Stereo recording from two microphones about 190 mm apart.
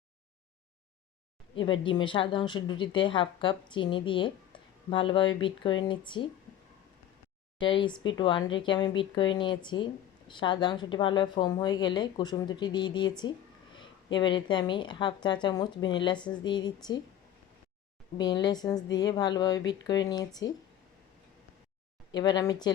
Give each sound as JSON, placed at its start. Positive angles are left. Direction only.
{"t": 1.8, "sound": "speech", "side_deg": 25}
{"t": 7.6, "sound": "speech", "side_deg": 25}
{"t": 18.2, "sound": "speech", "side_deg": 20}
{"t": 22.1, "sound": "speech", "side_deg": 20}